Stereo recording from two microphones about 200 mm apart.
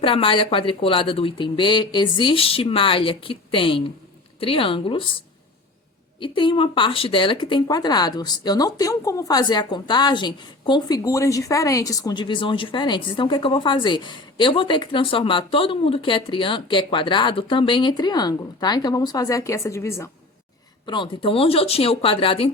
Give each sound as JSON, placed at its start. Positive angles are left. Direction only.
{"t": 0.0, "sound": "speech", "side_deg": 25}
{"t": 6.1, "sound": "speech", "side_deg": 25}